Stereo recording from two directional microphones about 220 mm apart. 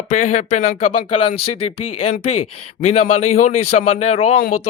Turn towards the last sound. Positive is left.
turn(degrees=30)  # may be behind; listen again after turning